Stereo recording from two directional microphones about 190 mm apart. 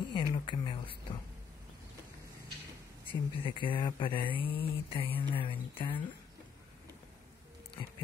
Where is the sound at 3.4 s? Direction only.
25° left (ahead or behind).